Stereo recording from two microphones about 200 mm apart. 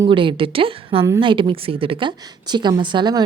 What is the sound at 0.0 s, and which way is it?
A woman's voice, 25° right (ahead or behind).